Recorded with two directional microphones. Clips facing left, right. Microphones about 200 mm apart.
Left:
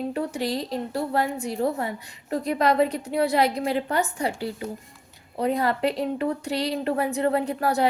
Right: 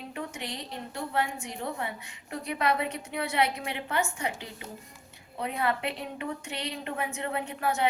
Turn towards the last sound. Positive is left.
turn(degrees=35)  # may be behind; listen again after turning